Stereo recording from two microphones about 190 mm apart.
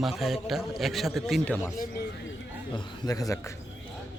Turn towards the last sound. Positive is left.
turn(degrees=20)  # may be behind; listen again after turning